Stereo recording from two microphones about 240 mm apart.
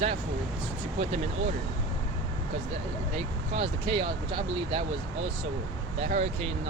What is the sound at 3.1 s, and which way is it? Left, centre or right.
Speech, right.